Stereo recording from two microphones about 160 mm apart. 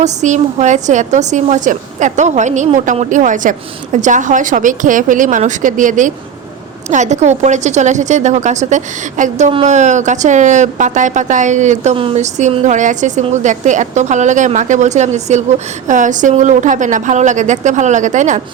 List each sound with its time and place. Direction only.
0.0 s speech: 45° right (ahead or behind)